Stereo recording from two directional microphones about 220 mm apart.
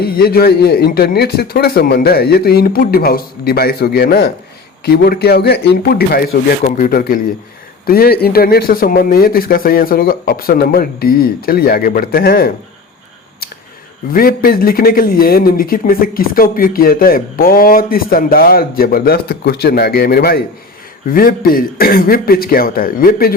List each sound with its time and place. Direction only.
0.0 s speech: 45° left (ahead or behind)
14.1 s a man's voice: 40° left (ahead or behind)